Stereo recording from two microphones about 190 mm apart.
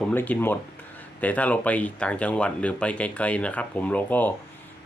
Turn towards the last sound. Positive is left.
turn(degrees=10)  # may be behind; listen again after turning